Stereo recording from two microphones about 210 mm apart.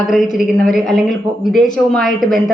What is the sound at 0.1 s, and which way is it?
A woman's voice, centre (ahead or behind).